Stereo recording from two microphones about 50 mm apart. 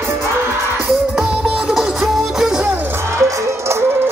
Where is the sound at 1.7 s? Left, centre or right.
Centre.